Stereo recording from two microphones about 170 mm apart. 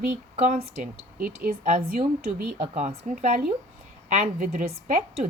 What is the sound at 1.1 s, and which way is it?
Speech, 55° right (ahead or behind).